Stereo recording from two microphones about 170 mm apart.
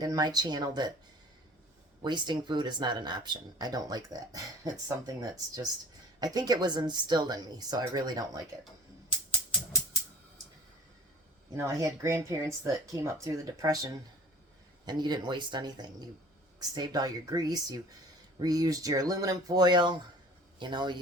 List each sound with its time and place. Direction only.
0.0 s speech: 25° right (ahead or behind)
2.0 s speech: 25° right (ahead or behind)
11.5 s speech: 20° right (ahead or behind)